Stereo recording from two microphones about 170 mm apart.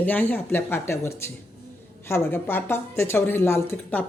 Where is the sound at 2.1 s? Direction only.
15° left (ahead or behind).